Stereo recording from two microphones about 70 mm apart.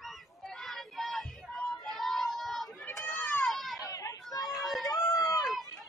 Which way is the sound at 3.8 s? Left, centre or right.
Left.